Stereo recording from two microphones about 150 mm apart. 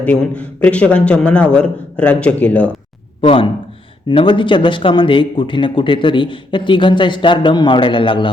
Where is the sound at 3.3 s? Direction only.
35° left (ahead or behind).